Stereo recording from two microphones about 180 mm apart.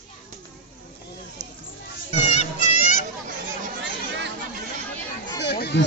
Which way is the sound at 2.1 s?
35° left (ahead or behind).